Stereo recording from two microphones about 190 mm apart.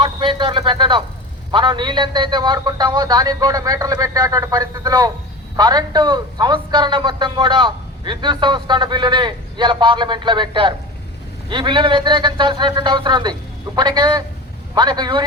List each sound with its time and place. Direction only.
0.0 s a man's voice: 25° right (ahead or behind)